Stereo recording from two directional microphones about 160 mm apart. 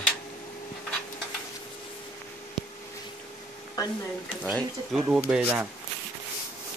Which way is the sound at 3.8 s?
25° left (ahead or behind).